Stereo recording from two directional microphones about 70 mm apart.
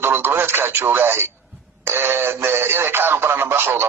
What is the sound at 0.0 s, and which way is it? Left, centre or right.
Speech, right.